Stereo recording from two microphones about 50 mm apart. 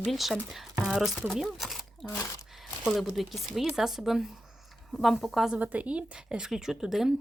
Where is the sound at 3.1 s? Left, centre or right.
Centre.